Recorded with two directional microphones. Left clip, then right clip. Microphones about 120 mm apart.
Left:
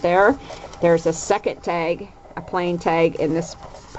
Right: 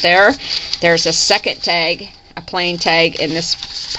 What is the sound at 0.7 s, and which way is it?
Speech, 30° right (ahead or behind).